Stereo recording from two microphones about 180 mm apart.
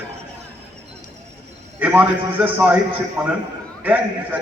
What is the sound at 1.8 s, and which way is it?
A man's voice, 10° right (ahead or behind).